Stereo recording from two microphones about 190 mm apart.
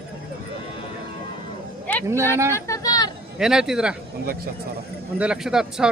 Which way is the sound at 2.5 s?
20° left (ahead or behind).